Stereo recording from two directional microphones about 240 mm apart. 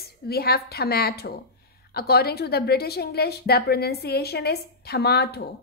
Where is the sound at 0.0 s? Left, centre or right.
Left.